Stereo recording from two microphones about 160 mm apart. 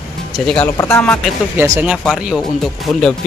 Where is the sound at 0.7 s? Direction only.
20° left (ahead or behind).